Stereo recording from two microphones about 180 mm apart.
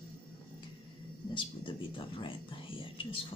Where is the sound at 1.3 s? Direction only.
30° left (ahead or behind).